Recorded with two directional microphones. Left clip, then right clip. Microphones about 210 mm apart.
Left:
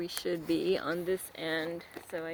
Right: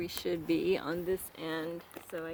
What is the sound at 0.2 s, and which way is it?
Speech, 35° right (ahead or behind).